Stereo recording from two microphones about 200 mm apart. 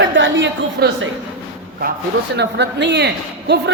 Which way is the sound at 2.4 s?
60° right (ahead or behind).